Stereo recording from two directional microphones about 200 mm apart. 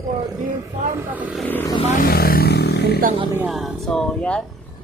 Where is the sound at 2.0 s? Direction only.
50° left (ahead or behind).